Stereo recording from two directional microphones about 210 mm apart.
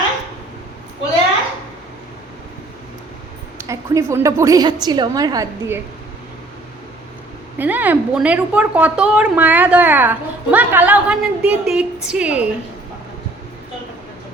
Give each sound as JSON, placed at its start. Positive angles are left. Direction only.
{"t": 3.6, "sound": "a woman's voice", "side_deg": -15}
{"t": 7.6, "sound": "a woman's voice", "side_deg": -10}